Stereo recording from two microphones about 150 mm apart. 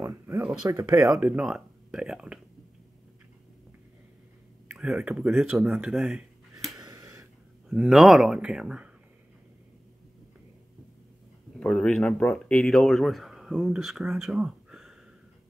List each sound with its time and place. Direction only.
0.0 s speech: 15° right (ahead or behind)
0.4 s speech: 5° right (ahead or behind)
4.7 s speech: 5° right (ahead or behind)
6.8 s a sound: 25° right (ahead or behind)
7.7 s speech: 5° right (ahead or behind)
11.6 s speech: 5° left (ahead or behind)